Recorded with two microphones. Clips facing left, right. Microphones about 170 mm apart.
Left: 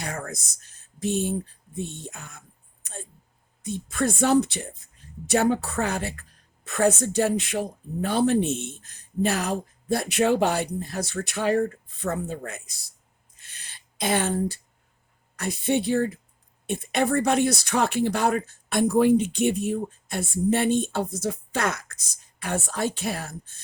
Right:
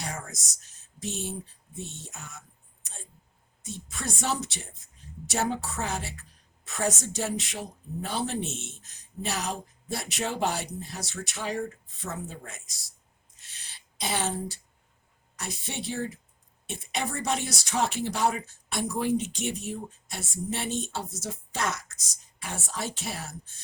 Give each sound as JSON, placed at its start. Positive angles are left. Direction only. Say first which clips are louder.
{"t": 0.0, "sound": "speech", "louder": "left 5 dB", "side_deg": 55}
{"t": 3.6, "sound": "speech", "louder": "left 11 dB", "side_deg": 55}
{"t": 13.4, "sound": "a sound", "louder": "left 3 dB", "side_deg": 55}
{"t": 15.4, "sound": "speech", "louder": "left 12 dB", "side_deg": 55}